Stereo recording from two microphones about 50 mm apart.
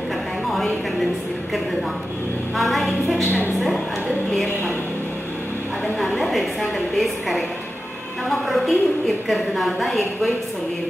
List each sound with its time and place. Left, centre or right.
2.5 s a woman's voice: centre
3.3 s a woman's voice: left
3.5 s a woman's voice: centre
6.1 s a woman's voice: centre